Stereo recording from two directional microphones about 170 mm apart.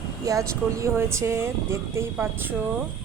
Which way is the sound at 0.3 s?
20° right (ahead or behind).